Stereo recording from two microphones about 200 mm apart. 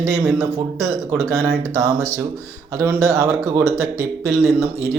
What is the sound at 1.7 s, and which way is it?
Speech, 15° right (ahead or behind).